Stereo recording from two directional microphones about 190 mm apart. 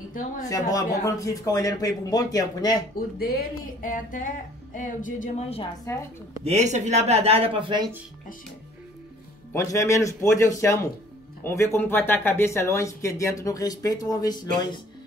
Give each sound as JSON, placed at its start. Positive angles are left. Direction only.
{"t": 0.4, "sound": "speech", "side_deg": 20}
{"t": 3.2, "sound": "music", "side_deg": 50}
{"t": 5.9, "sound": "speech", "side_deg": 15}
{"t": 6.4, "sound": "speech", "side_deg": -35}
{"t": 9.5, "sound": "speech", "side_deg": 15}